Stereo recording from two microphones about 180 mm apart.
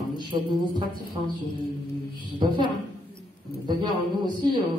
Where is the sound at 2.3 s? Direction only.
25° right (ahead or behind).